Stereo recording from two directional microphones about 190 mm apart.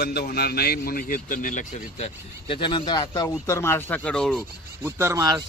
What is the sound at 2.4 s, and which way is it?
Speech, 25° left (ahead or behind).